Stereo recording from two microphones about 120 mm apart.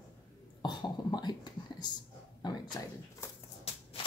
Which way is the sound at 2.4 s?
35° left (ahead or behind).